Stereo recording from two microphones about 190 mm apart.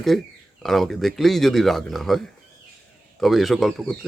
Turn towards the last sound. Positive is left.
turn(degrees=0)  # may be behind; listen again after turning